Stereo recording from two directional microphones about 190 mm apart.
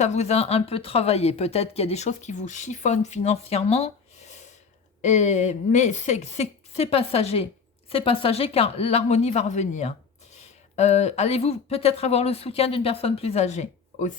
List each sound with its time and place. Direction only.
0.0 s speech: 35° left (ahead or behind)